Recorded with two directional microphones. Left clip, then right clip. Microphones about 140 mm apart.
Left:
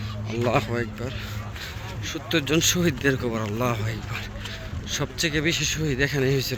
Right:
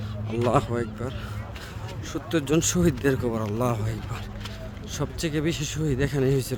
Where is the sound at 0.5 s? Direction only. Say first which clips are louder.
Even; 35° right (ahead or behind).